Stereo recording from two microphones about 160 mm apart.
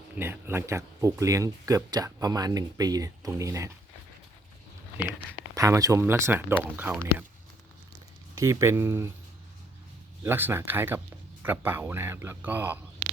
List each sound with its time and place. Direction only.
0.2 s speech: 15° right (ahead or behind)
5.5 s speech: 20° right (ahead or behind)
8.4 s speech: 20° right (ahead or behind)
10.2 s speech: 15° right (ahead or behind)